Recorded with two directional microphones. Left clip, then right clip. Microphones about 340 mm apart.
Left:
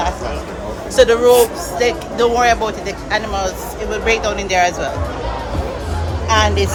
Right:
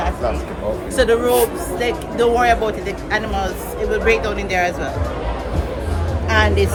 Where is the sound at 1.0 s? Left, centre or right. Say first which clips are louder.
Left 5 dB; centre.